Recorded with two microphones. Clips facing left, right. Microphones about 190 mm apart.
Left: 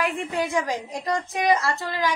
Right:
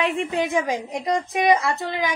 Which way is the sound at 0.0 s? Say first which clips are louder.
Right 3 dB; 20° right (ahead or behind).